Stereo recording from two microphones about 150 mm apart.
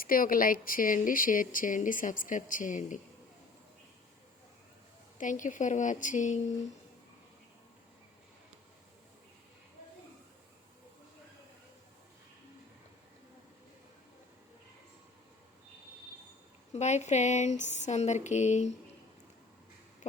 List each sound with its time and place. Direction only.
0.0 s speech: 70° left (ahead or behind)
5.1 s speech: 60° left (ahead or behind)
16.7 s a sound: 50° left (ahead or behind)